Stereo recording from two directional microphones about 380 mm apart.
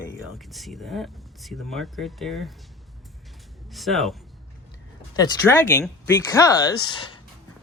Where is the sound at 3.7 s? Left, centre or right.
Centre.